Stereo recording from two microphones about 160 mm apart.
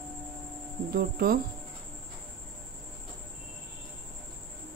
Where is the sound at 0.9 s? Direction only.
75° right (ahead or behind).